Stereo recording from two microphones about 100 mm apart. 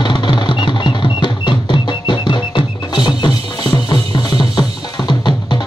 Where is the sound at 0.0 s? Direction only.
50° left (ahead or behind).